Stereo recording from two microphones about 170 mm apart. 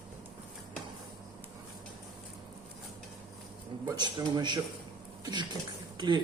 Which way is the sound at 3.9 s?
25° right (ahead or behind).